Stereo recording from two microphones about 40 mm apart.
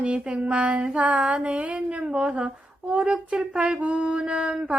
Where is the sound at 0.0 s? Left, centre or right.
Right.